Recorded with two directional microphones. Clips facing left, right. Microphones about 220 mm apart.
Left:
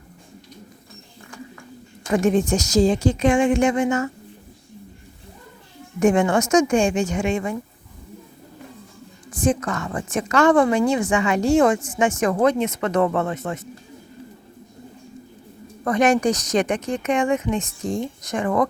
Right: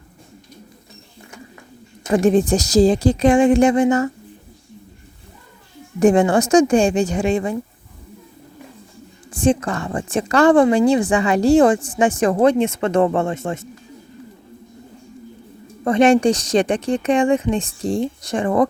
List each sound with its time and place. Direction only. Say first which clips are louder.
2.1 s a woman's voice: right 4 dB; 35° right (ahead or behind)
6.0 s a woman's voice: right 4 dB; 35° right (ahead or behind)
9.3 s a woman's voice: right 4 dB; 30° right (ahead or behind)
15.8 s a woman's voice: right 4 dB; 25° right (ahead or behind)